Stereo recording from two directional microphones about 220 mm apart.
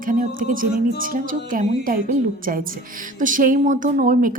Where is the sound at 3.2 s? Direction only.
40° right (ahead or behind).